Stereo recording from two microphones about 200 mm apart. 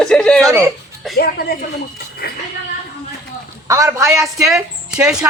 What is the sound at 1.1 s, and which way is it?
A woman's voice, 50° left (ahead or behind).